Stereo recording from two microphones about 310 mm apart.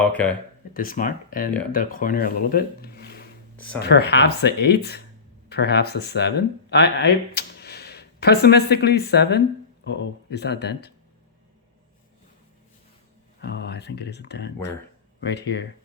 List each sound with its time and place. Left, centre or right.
0.1 s speech: centre
0.7 s speech: left
13.4 s speech: left